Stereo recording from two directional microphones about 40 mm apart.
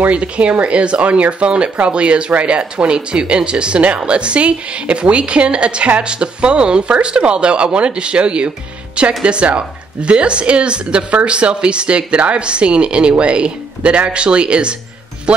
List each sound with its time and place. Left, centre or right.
0.1 s speech: right